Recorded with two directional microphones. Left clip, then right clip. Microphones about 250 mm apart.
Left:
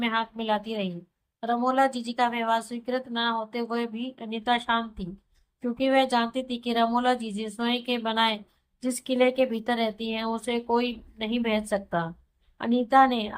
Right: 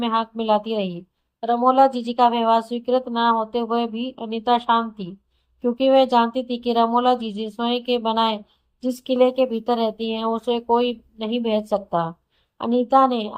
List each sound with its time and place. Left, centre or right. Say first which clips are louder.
0.0 s a woman's voice: right 5 dB; centre